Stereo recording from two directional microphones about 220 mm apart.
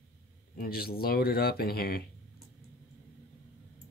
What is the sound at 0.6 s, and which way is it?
Speech, 45° left (ahead or behind).